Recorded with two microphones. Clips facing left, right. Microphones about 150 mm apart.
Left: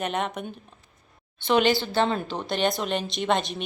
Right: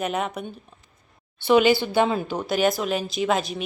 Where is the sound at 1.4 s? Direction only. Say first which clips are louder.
Right 4 dB; 10° right (ahead or behind).